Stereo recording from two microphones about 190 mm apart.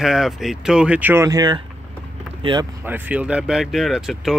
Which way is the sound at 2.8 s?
10° right (ahead or behind).